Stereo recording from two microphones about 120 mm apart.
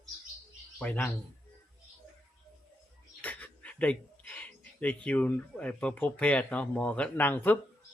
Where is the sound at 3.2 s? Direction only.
10° left (ahead or behind).